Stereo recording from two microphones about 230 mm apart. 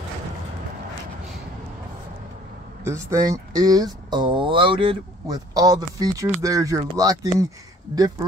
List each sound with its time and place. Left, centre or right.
2.8 s speech: centre